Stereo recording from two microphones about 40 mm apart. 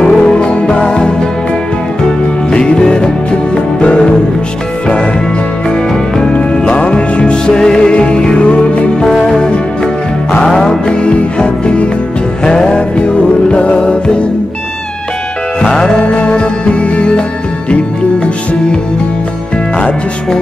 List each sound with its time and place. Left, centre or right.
0.0 s music: left
2.5 s music: centre
6.3 s music: left
9.2 s music: centre
15.6 s music: centre
18.2 s music: left